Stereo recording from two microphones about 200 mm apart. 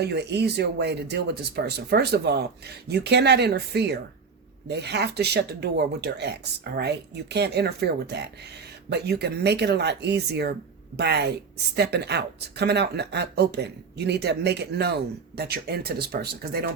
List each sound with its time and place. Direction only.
0.0 s a woman's voice: 55° right (ahead or behind)